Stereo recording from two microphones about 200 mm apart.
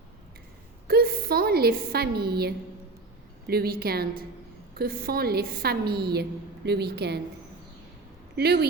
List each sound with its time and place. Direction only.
0.9 s a woman's voice: 50° right (ahead or behind)
8.4 s a woman's voice: 55° right (ahead or behind)